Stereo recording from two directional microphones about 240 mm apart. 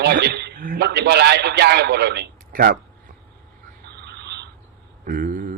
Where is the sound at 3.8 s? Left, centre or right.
Right.